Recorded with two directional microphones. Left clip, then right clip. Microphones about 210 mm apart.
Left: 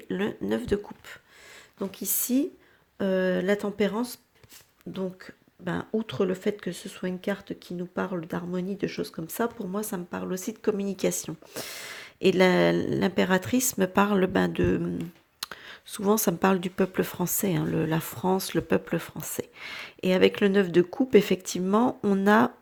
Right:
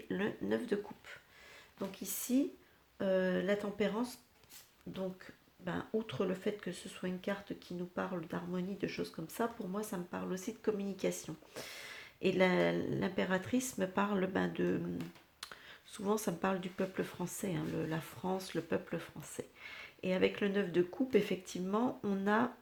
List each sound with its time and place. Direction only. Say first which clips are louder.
0.1 s speech: left 7 dB; 30° left (ahead or behind)